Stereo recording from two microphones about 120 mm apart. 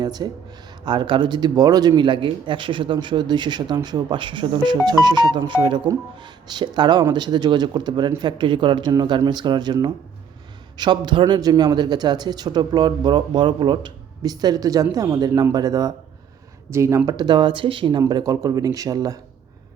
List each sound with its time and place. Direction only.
0.0 s speech: 35° right (ahead or behind)
17.1 s speech: 35° right (ahead or behind)
18.1 s speech: 30° right (ahead or behind)